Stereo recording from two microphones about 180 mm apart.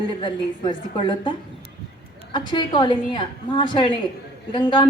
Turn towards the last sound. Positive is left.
turn(degrees=25)  # may be behind; listen again after turning